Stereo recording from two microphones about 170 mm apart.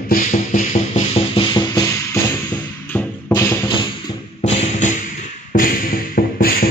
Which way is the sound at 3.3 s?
20° left (ahead or behind).